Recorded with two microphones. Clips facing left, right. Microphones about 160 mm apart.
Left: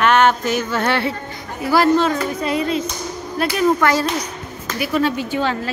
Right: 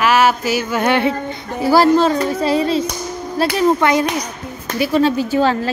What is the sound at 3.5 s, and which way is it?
Speech, 20° right (ahead or behind).